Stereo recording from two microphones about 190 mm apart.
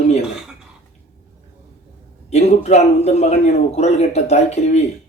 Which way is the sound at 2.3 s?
35° left (ahead or behind).